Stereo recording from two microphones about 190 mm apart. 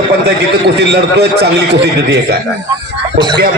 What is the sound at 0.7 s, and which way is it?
Speech, 60° right (ahead or behind).